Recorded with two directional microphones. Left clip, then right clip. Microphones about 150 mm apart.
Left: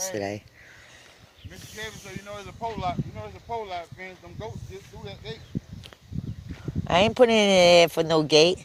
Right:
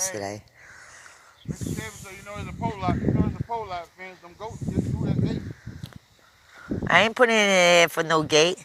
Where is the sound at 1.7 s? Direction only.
10° right (ahead or behind); by 4.5 s 10° left (ahead or behind).